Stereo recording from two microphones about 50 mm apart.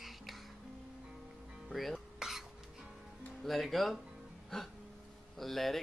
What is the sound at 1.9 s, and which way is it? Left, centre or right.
Dishes, centre.